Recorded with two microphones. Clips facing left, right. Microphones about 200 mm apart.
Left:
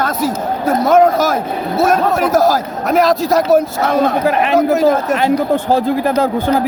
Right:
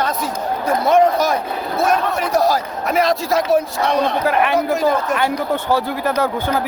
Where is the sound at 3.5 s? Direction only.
45° left (ahead or behind).